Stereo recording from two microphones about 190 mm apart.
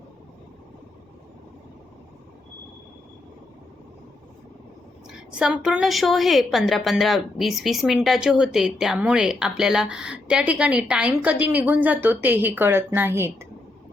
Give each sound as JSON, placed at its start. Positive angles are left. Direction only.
{"t": 5.0, "sound": "a woman's voice", "side_deg": -5}